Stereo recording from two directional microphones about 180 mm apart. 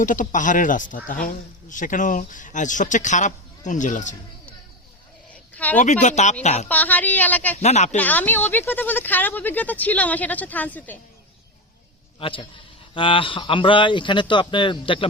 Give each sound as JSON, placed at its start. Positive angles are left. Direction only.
{"t": 0.0, "sound": "speech", "side_deg": 45}
{"t": 5.3, "sound": "a sound", "side_deg": 10}
{"t": 5.8, "sound": "speech", "side_deg": 40}
{"t": 6.7, "sound": "speech", "side_deg": 10}
{"t": 7.6, "sound": "speech", "side_deg": 40}
{"t": 7.9, "sound": "speech", "side_deg": 10}
{"t": 12.2, "sound": "speech", "side_deg": 30}